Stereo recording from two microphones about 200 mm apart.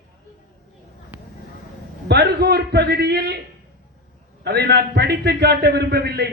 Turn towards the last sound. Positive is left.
turn(degrees=-55)  # may be behind; listen again after turning